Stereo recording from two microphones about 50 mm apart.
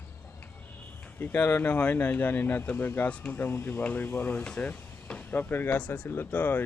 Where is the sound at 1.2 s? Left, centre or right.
Left.